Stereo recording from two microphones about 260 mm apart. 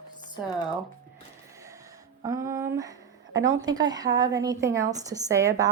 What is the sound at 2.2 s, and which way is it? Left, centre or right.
Speech, centre.